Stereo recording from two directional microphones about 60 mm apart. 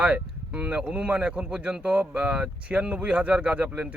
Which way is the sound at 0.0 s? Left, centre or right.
Centre.